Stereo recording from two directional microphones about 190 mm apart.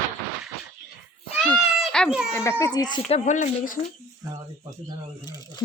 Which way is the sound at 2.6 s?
20° left (ahead or behind).